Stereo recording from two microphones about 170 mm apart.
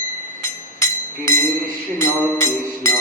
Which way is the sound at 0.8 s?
15° left (ahead or behind).